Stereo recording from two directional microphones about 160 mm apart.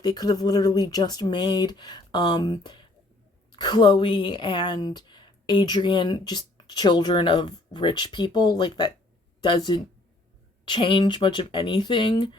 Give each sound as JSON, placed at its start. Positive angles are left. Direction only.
{"t": 0.0, "sound": "a woman's voice", "side_deg": 25}